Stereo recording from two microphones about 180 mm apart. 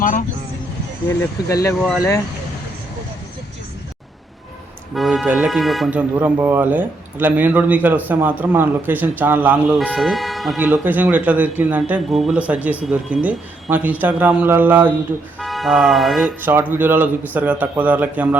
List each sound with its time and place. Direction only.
0.0 s speech: 45° left (ahead or behind)
1.0 s speech: 15° left (ahead or behind)
4.9 s speech: centre (ahead or behind)
16.4 s speech: 10° right (ahead or behind)